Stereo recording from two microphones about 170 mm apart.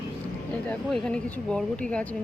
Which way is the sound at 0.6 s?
5° left (ahead or behind).